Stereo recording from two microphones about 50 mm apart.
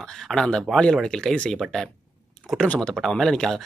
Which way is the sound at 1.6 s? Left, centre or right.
Centre.